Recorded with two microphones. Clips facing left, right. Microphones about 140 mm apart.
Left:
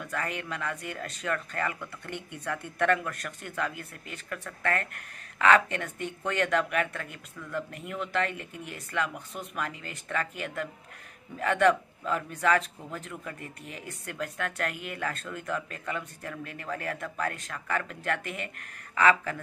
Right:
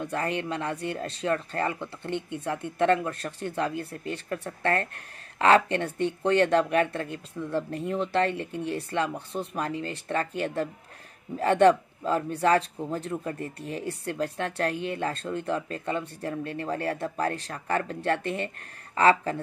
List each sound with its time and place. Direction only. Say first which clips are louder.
0.0 s a man's voice: right 5 dB; 30° right (ahead or behind)